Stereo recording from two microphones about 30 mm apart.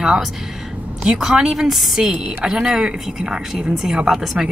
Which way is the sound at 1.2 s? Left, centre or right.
Centre.